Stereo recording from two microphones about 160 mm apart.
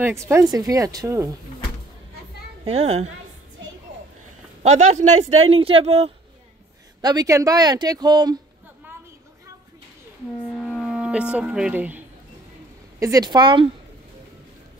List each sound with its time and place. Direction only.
0.3 s speech: 20° right (ahead or behind)
2.6 s speech: 40° right (ahead or behind)
4.6 s speech: 45° right (ahead or behind)
7.0 s speech: 25° right (ahead or behind)
10.5 s music: 5° left (ahead or behind)
13.0 s speech: 25° right (ahead or behind)